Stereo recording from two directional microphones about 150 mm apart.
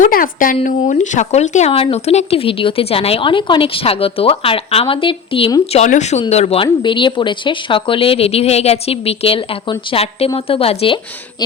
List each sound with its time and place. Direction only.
0.0 s a woman's voice: 65° left (ahead or behind); by 5.5 s 35° left (ahead or behind)
5.7 s speech: 50° left (ahead or behind); by 11.4 s 35° left (ahead or behind)